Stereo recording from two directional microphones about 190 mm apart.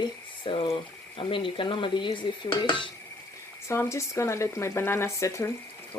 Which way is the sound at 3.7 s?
15° left (ahead or behind).